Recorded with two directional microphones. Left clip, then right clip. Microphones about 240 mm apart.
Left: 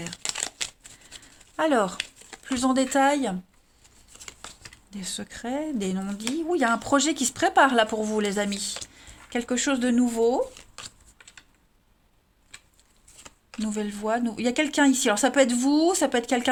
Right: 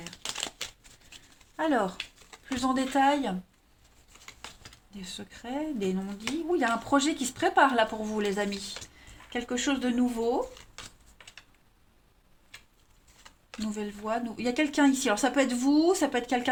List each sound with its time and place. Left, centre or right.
1.5 s speech: left
4.9 s speech: left
13.7 s speech: left